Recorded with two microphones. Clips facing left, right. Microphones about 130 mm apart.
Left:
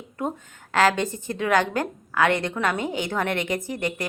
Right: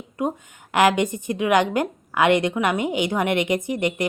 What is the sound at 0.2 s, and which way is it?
A woman's voice, 15° right (ahead or behind).